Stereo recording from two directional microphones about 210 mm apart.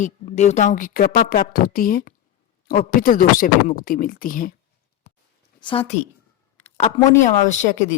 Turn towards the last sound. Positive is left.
turn(degrees=35)  # may be behind; listen again after turning